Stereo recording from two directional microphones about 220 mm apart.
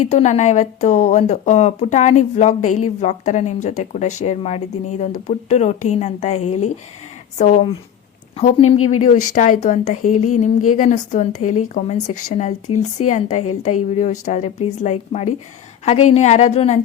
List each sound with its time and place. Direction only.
0.1 s a woman's voice: 30° left (ahead or behind)
10.0 s a sound: 90° left
10.8 s speech: 35° left (ahead or behind)